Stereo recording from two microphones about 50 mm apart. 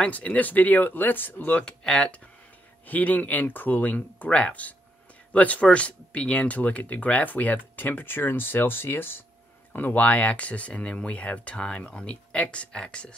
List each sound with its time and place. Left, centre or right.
0.0 s speech: left
1.6 s speech: centre
2.9 s speech: left
9.9 s speech: left